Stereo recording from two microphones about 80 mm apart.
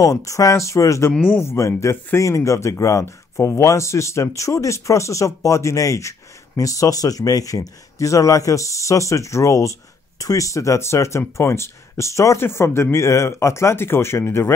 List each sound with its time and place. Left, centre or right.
0.0 s speech: left